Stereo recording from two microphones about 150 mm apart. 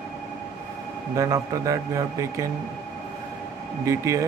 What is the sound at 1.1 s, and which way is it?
A man's voice, 20° right (ahead or behind).